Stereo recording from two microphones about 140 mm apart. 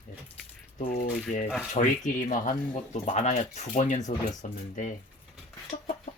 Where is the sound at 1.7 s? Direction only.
65° left (ahead or behind).